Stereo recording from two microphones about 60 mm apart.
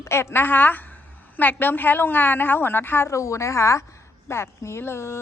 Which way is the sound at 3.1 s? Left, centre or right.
Left.